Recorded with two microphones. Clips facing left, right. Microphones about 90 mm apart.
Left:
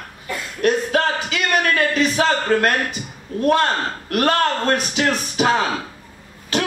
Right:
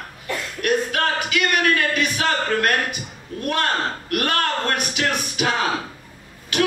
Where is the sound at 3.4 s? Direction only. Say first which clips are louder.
Left 5 dB; 30° left (ahead or behind).